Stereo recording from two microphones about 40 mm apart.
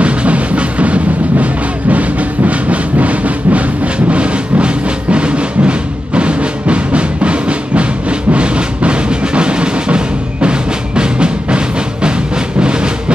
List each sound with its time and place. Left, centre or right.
0.0 s music: right